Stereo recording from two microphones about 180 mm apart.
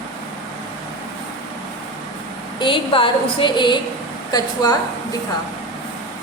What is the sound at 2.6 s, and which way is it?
A woman's voice, 25° left (ahead or behind).